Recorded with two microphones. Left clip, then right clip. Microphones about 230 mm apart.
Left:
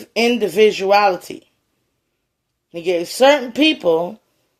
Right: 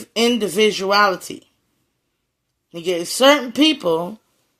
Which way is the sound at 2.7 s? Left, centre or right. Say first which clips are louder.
Left 3 dB; right.